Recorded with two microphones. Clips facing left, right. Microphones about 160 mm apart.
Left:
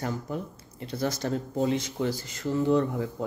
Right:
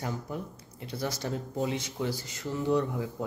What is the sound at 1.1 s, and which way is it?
Speech, 15° right (ahead or behind).